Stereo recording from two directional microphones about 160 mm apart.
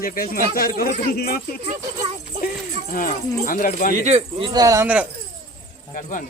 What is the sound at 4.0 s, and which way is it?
Speech, 40° right (ahead or behind).